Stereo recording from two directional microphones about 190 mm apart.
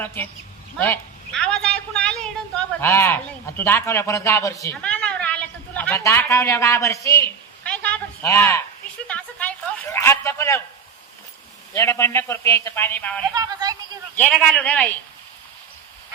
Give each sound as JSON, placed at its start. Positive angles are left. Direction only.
{"t": 0.0, "sound": "a man's voice", "side_deg": 10}
{"t": 4.8, "sound": "a sound", "side_deg": 5}
{"t": 11.7, "sound": "a man's voice", "side_deg": 15}
{"t": 13.3, "sound": "speech", "side_deg": -20}
{"t": 14.2, "sound": "a man's voice", "side_deg": 5}